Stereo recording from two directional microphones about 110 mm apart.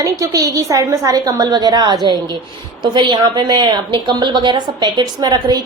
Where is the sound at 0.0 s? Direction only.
30° right (ahead or behind).